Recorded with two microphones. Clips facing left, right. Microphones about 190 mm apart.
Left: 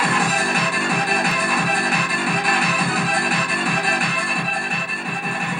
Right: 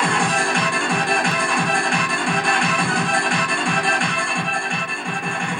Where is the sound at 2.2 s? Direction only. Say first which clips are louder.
Even; 25° right (ahead or behind).